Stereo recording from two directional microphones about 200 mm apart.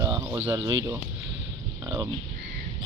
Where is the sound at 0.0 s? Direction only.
15° right (ahead or behind).